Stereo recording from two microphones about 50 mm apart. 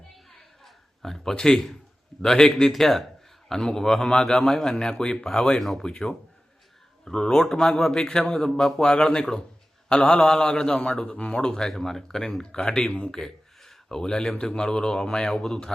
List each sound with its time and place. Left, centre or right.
0.3 s a sound: centre
2.2 s speech: centre
5.5 s speech: centre
5.8 s speech: centre
8.8 s speech: centre
9.9 s mantra: centre
10.2 s speech: centre